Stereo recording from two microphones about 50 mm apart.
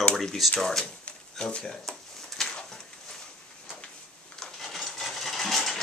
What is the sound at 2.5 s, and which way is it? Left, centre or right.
Bird, centre.